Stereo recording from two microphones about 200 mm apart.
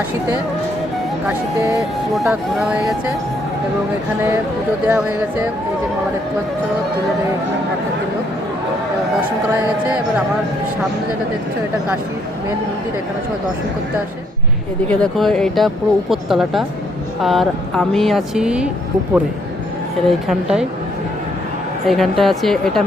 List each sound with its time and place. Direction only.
1.3 s speech: 15° right (ahead or behind)
2.1 s speech: centre (ahead or behind)
14.8 s speech: 5° left (ahead or behind)
20.1 s speech: centre (ahead or behind)
21.8 s speech: centre (ahead or behind)